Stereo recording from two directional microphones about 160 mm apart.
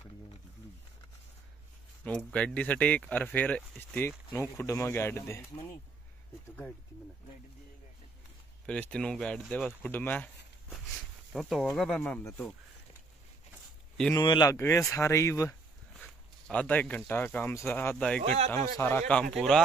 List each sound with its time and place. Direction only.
2.0 s speech: 10° left (ahead or behind)
8.6 s speech: 5° left (ahead or behind)
14.1 s speech: 25° left (ahead or behind)
16.4 s speech: 10° left (ahead or behind)